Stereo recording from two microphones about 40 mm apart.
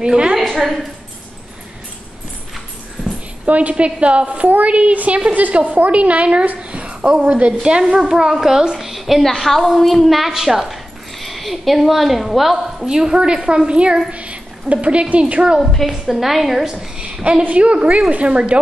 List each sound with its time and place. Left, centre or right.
0.0 s a woman's voice: centre
0.4 s a sound: centre
3.4 s a woman's voice: right
7.6 s a woman's voice: right; by 9.2 s centre
9.2 s a woman's voice: centre
12.8 s a woman's voice: centre; by 15.4 s right
15.6 s a woman's voice: centre
15.9 s a woman's voice: centre
16.7 s a woman's voice: right